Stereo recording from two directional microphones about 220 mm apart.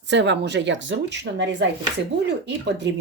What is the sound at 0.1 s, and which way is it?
Speech, 50° right (ahead or behind).